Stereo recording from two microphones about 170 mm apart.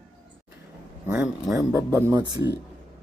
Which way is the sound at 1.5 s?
20° right (ahead or behind).